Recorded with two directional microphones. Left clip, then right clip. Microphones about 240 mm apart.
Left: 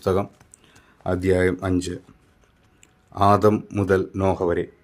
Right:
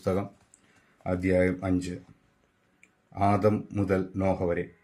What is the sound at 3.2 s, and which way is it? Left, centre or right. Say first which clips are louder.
Speech: left 8 dB; left.